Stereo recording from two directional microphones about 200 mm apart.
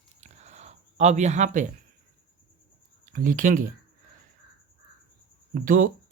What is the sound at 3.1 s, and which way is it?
Speech, 45° right (ahead or behind).